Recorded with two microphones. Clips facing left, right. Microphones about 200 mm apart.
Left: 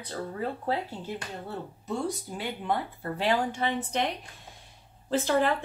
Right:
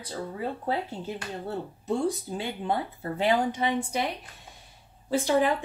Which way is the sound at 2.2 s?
30° right (ahead or behind).